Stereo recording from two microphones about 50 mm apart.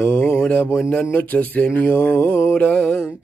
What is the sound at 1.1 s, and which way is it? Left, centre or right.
Mantra, left.